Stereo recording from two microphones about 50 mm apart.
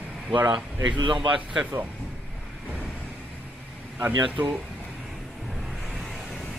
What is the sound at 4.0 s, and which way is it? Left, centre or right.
Speech, right.